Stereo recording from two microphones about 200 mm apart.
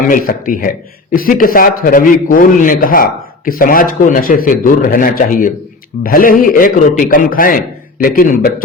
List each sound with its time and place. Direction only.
0.1 s a man's voice: 45° left (ahead or behind)